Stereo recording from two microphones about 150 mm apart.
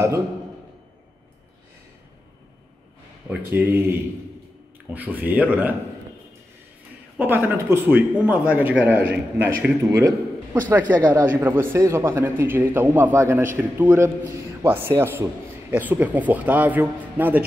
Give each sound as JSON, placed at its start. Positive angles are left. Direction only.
{"t": 3.3, "sound": "speech", "side_deg": -10}
{"t": 7.2, "sound": "speech", "side_deg": -15}